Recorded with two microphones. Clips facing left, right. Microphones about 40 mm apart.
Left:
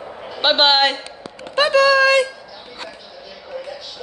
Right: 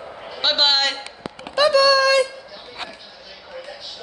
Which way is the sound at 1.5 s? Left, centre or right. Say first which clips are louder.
Left 1 dB; left.